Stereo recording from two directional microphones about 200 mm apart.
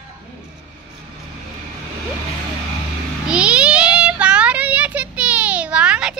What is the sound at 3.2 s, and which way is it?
Child singing, 5° right (ahead or behind).